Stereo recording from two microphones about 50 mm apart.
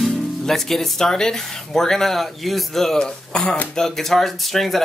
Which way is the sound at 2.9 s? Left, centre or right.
Centre.